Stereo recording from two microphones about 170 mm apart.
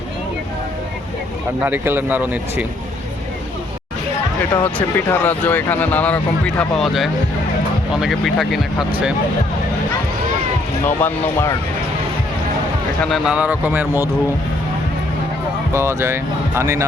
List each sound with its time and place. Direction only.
1.6 s speech: 10° right (ahead or behind)
4.4 s speech: 10° left (ahead or behind)
10.8 s speech: 15° left (ahead or behind)
13.1 s speech: centre (ahead or behind)
15.7 s speech: 15° right (ahead or behind)